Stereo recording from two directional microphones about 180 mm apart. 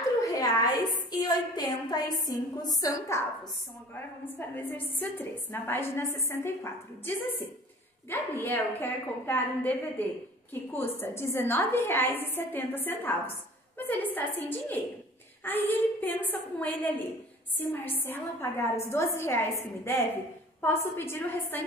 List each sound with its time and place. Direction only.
0.2 s a woman's voice: 20° left (ahead or behind)